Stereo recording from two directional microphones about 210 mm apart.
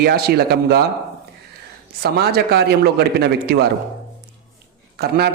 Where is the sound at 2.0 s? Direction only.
50° right (ahead or behind).